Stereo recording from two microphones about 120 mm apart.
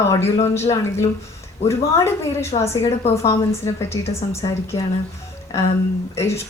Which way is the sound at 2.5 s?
60° left (ahead or behind).